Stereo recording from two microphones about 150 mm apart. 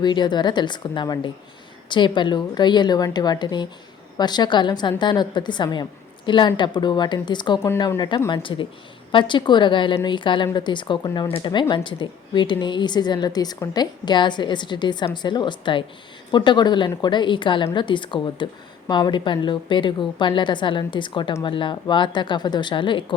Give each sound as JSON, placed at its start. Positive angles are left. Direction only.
{"t": 0.0, "sound": "a woman's voice", "side_deg": 30}